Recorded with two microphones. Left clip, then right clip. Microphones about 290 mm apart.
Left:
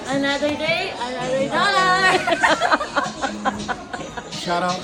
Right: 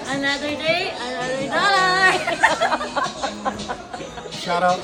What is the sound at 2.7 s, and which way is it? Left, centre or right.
Snicker, left.